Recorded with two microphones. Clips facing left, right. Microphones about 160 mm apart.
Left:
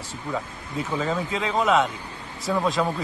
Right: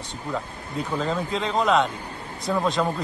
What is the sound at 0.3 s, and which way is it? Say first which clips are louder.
Speech: even; 5° left (ahead or behind).